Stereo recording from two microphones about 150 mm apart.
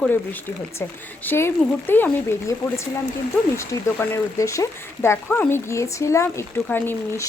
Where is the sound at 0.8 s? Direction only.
15° left (ahead or behind).